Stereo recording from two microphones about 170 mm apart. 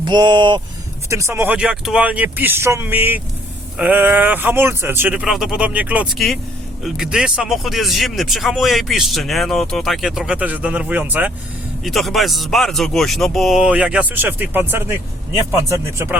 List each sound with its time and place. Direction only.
0.0 s speech: 25° right (ahead or behind)
1.1 s speech: 15° right (ahead or behind)